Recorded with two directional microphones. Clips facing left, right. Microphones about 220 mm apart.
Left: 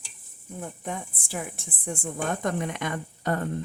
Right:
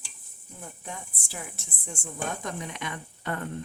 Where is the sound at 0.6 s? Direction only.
55° left (ahead or behind).